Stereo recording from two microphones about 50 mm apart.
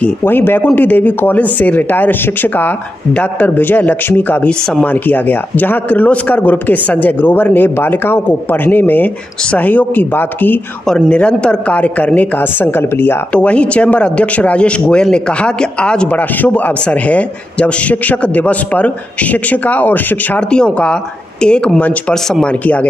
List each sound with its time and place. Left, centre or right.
0.2 s speech: left
3.3 s speech: left
11.1 s a man's voice: left
13.3 s a man's voice: left
17.1 s a man's voice: left
20.5 s speech: centre